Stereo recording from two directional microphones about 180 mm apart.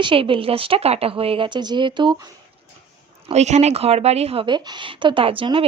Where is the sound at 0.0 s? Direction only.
30° right (ahead or behind).